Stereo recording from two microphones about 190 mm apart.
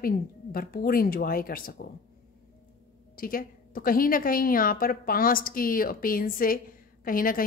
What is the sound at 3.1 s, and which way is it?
Speech, 50° left (ahead or behind).